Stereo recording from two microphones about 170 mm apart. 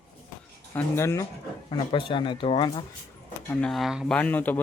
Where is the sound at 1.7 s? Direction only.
30° left (ahead or behind).